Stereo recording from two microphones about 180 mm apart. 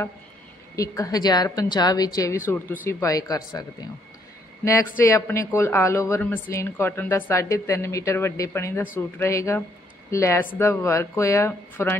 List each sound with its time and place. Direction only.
0.7 s a woman's voice: 20° left (ahead or behind)